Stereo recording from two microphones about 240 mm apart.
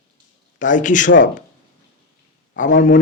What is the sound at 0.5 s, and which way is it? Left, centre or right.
Speech, left.